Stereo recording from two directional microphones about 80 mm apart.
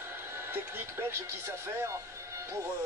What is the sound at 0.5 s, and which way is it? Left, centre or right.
A man's voice, right.